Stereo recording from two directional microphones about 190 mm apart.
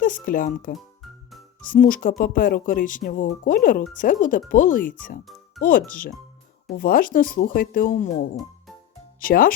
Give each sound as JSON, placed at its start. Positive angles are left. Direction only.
{"t": 0.0, "sound": "speech", "side_deg": 45}
{"t": 1.0, "sound": "music", "side_deg": 0}
{"t": 1.6, "sound": "speech", "side_deg": 45}
{"t": 9.2, "sound": "speech", "side_deg": 50}